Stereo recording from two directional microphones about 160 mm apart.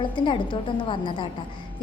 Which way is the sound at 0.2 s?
30° left (ahead or behind).